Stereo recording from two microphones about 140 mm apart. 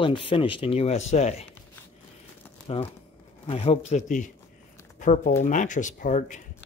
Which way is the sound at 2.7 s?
45° left (ahead or behind).